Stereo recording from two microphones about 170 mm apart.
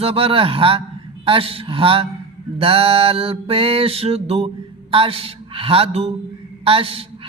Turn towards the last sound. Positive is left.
turn(degrees=-35)  # may be behind; listen again after turning